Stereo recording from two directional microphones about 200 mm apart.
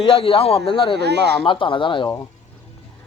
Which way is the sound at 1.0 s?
55° right (ahead or behind).